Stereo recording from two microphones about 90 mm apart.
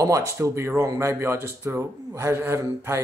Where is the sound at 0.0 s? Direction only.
35° right (ahead or behind).